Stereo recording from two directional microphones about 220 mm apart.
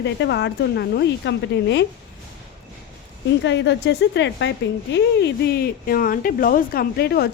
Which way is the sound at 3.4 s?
55° left (ahead or behind).